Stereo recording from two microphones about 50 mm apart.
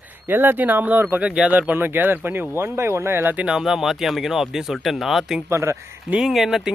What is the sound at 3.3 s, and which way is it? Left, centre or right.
Speech, right.